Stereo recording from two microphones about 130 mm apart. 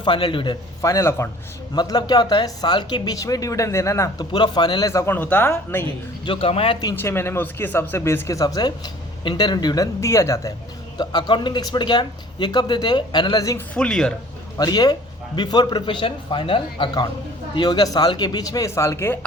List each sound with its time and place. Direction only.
0.0 s speech: 40° left (ahead or behind)
0.8 s speech: 25° left (ahead or behind)
4.3 s speech: 35° left (ahead or behind)
4.9 s speech: 20° left (ahead or behind)
6.2 s a man's voice: 45° left (ahead or behind)
6.9 s speech: 15° left (ahead or behind)
10.9 s speech: 35° left (ahead or behind)
13.7 s speech: 5° left (ahead or behind)
14.6 s speech: 30° left (ahead or behind)